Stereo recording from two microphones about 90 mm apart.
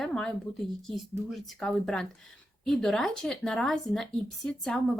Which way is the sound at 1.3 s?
5° left (ahead or behind).